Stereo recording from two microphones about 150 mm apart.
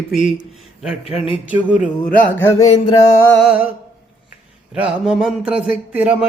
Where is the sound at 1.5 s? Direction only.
5° right (ahead or behind).